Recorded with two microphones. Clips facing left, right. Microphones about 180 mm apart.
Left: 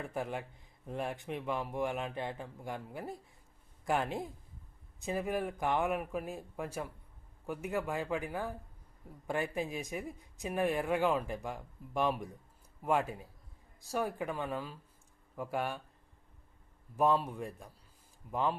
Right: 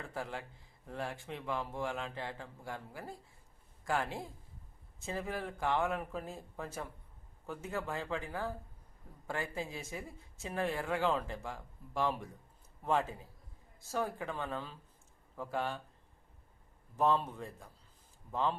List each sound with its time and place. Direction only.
0.0 s speech: 20° left (ahead or behind)
17.0 s speech: 10° left (ahead or behind)